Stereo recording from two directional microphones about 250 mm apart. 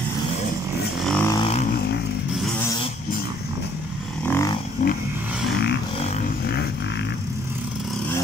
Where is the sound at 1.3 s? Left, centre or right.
Left.